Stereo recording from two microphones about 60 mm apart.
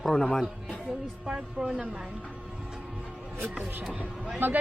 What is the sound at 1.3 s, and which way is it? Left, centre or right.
Speech, centre.